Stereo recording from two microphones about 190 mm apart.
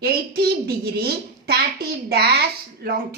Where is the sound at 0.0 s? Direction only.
55° right (ahead or behind).